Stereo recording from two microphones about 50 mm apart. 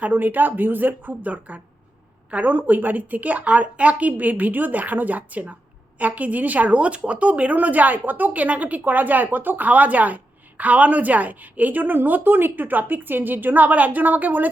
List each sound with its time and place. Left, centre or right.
0.0 s a woman's voice: right